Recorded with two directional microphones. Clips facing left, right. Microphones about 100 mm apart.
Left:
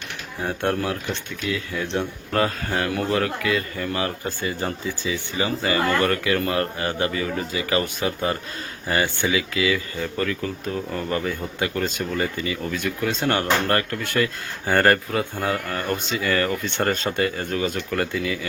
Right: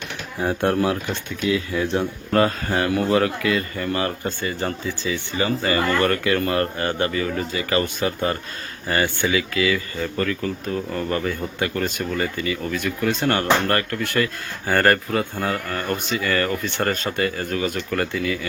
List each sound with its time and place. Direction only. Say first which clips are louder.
0.4 s speech: right 4 dB; 10° right (ahead or behind); by 17.7 s 25° left (ahead or behind)
17.9 s speech: right 2 dB; 15° left (ahead or behind)